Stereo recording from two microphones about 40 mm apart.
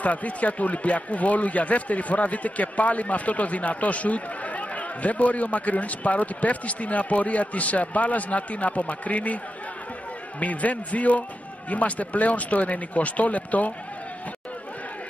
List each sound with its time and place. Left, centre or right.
0.0 s speech: left
10.4 s speech: left